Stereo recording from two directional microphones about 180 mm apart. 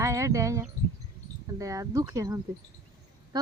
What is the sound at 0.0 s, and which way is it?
Speech, 15° right (ahead or behind).